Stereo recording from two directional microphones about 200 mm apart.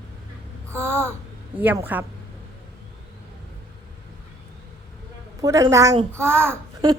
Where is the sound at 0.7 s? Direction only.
15° right (ahead or behind).